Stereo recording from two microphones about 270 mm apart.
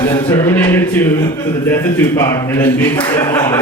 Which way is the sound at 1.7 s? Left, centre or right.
Centre.